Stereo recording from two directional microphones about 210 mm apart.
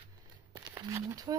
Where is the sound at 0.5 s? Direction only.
15° right (ahead or behind).